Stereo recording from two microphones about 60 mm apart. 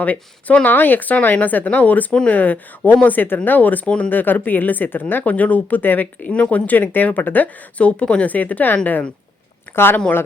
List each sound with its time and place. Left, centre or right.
0.0 s speech: left
4.1 s speech: left
9.7 s speech: left